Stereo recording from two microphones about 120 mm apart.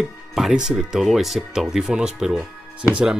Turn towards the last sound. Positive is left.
turn(degrees=-5)  # may be behind; listen again after turning